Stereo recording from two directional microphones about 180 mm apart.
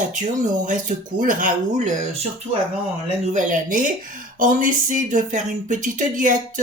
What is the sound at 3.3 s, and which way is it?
Speech, 45° right (ahead or behind).